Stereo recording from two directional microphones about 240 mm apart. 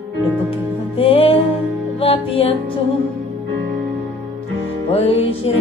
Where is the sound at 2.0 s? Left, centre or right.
Left.